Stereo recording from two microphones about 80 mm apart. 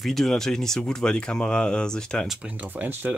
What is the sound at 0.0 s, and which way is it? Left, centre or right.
Speech, centre.